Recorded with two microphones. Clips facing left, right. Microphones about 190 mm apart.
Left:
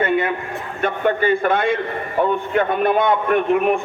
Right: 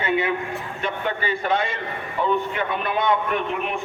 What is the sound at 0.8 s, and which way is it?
A man's voice, 50° left (ahead or behind).